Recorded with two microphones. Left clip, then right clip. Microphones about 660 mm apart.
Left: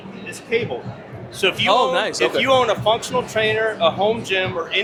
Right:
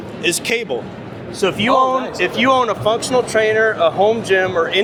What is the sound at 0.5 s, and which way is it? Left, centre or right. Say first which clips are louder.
Speech: even; right.